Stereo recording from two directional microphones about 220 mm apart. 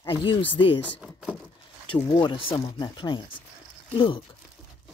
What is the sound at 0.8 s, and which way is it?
Speech, 5° left (ahead or behind).